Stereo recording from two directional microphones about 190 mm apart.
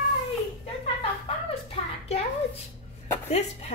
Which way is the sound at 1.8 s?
30° left (ahead or behind).